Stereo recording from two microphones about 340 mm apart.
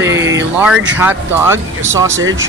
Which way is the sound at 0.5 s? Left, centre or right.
Centre.